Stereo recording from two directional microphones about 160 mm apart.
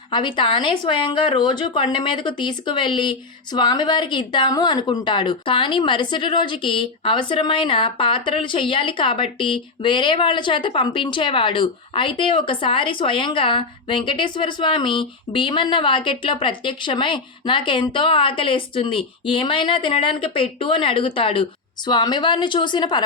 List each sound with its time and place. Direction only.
0.1 s a woman's voice: 30° left (ahead or behind)